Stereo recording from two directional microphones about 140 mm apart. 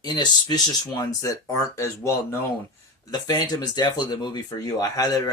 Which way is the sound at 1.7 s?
20° left (ahead or behind).